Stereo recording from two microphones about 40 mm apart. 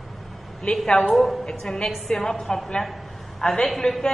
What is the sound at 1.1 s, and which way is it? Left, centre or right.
Speech, centre.